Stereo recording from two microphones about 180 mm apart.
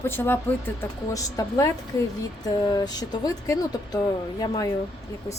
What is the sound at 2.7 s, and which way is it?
Speech, 20° left (ahead or behind).